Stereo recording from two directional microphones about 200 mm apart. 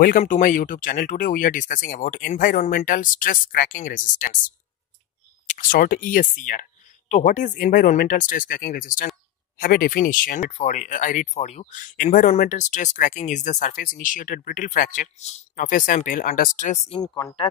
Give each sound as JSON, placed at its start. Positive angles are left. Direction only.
{"t": 0.2, "sound": "speech", "side_deg": 40}
{"t": 17.0, "sound": "speech", "side_deg": 20}